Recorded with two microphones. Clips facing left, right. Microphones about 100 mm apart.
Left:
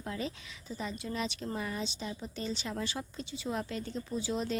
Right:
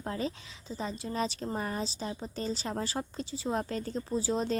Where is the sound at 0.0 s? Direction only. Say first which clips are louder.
Right 3 dB; 35° right (ahead or behind).